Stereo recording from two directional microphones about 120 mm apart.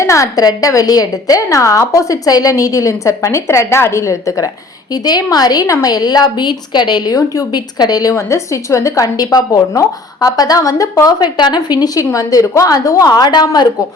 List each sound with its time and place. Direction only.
0.0 s a woman's voice: 25° left (ahead or behind)